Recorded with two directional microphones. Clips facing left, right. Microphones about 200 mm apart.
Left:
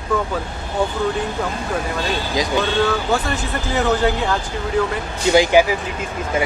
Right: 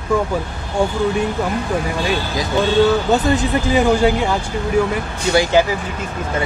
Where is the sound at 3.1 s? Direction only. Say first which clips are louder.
Right 5 dB; 20° right (ahead or behind).